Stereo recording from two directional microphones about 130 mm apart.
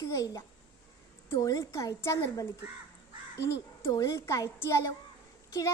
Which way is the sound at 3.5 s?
25° left (ahead or behind).